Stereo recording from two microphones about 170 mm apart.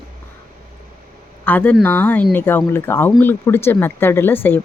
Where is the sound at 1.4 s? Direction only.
10° left (ahead or behind).